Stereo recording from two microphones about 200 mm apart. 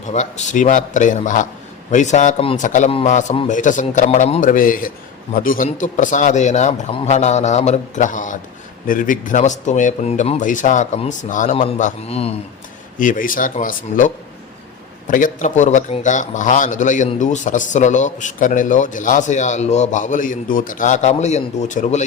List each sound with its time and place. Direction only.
0.0 s a man's voice: 35° left (ahead or behind)
13.0 s a man's voice: 40° left (ahead or behind)